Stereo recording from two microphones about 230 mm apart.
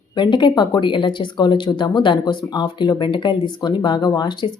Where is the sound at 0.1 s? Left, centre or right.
Centre.